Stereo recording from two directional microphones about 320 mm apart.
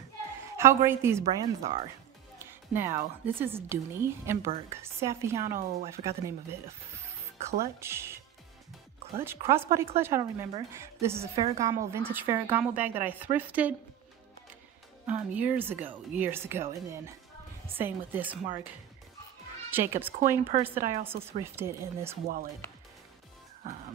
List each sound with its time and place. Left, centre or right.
0.6 s speech: centre
5.4 s speech: right
7.6 s speech: centre
9.2 s speech: centre
15.0 s a woman's voice: centre
19.7 s speech: centre